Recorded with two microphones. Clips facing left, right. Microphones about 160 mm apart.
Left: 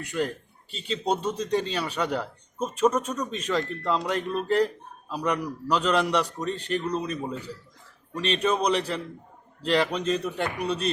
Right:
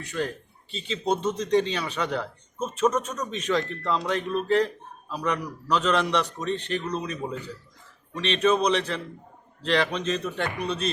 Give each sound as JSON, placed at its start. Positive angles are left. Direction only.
{"t": 0.1, "sound": "a man's voice", "side_deg": 10}